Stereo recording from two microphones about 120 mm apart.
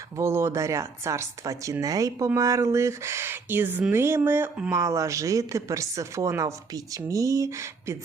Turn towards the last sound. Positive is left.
turn(degrees=-25)  # may be behind; listen again after turning